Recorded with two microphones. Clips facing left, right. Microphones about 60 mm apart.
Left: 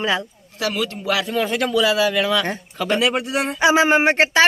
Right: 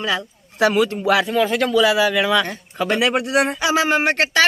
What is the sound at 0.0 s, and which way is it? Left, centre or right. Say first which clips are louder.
Speech: left 1 dB; left.